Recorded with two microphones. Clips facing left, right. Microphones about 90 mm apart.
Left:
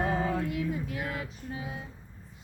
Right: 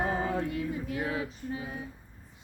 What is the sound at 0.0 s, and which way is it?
Music, 5° right (ahead or behind).